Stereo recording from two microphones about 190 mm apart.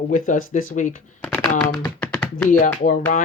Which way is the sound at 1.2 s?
5° left (ahead or behind).